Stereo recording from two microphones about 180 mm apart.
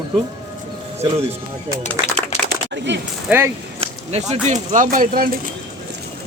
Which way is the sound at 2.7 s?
75° right (ahead or behind).